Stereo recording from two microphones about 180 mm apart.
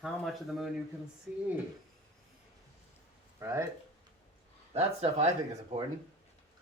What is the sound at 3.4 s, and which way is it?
Speech, 15° right (ahead or behind).